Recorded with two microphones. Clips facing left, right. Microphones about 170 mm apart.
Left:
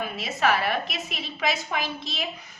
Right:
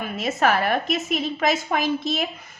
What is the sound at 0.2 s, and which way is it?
A woman's voice, 50° right (ahead or behind).